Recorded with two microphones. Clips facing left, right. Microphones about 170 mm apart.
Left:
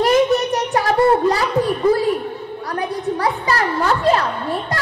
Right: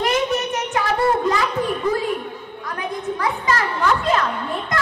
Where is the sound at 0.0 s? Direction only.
35° left (ahead or behind).